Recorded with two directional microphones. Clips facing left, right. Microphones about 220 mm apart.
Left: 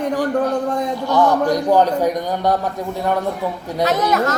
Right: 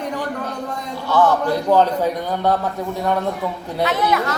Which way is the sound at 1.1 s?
15° left (ahead or behind).